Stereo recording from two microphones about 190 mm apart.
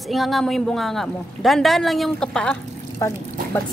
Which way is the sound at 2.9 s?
15° left (ahead or behind).